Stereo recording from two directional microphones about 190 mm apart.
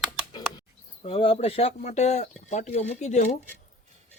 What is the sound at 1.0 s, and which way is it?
Speech, 30° left (ahead or behind).